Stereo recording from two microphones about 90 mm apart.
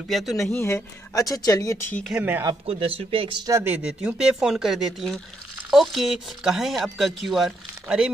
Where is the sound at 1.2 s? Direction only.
40° left (ahead or behind).